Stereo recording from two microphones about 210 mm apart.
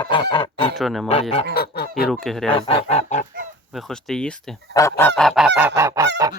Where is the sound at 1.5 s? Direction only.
50° left (ahead or behind).